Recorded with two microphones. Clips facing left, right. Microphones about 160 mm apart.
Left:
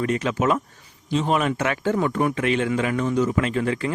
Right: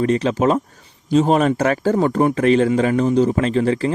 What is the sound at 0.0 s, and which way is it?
A man's voice, 30° right (ahead or behind).